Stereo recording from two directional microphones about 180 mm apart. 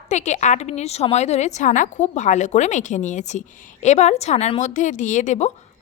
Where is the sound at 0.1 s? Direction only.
40° left (ahead or behind).